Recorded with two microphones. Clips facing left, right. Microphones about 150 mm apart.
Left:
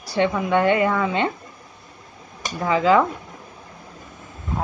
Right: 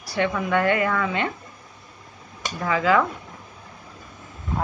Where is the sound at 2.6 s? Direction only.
25° left (ahead or behind).